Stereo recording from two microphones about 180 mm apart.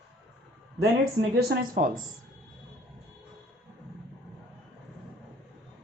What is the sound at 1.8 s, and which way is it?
Speech, 50° right (ahead or behind).